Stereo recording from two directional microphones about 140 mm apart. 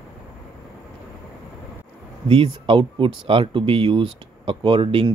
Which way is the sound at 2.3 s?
40° right (ahead or behind).